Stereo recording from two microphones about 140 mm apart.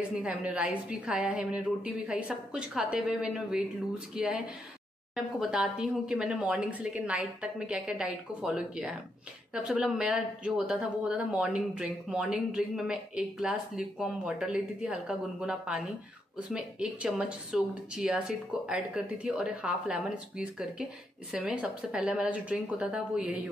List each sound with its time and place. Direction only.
0.2 s speech: 10° right (ahead or behind)